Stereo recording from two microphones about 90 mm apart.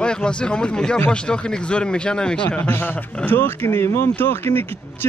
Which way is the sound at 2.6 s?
25° left (ahead or behind).